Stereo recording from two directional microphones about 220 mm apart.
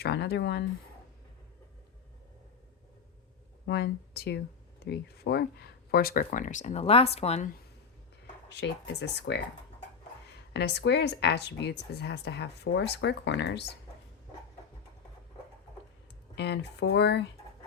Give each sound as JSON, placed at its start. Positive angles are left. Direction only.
{"t": 0.0, "sound": "speech", "side_deg": 50}
{"t": 3.7, "sound": "speech", "side_deg": 45}
{"t": 8.6, "sound": "speech", "side_deg": 50}
{"t": 10.5, "sound": "speech", "side_deg": 50}
{"t": 16.4, "sound": "speech", "side_deg": 50}